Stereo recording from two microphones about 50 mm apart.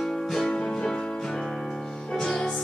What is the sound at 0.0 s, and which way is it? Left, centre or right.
Music, centre.